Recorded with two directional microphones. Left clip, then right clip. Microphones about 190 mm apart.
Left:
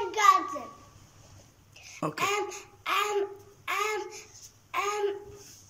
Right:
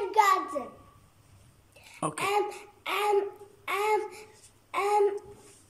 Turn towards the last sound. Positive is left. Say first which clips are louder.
# right 4 dB
turn(degrees=-25)  # may be behind; listen again after turning